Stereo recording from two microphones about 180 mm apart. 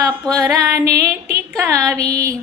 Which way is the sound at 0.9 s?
15° right (ahead or behind).